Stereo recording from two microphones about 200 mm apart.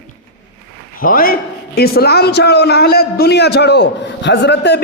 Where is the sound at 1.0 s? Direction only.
45° left (ahead or behind).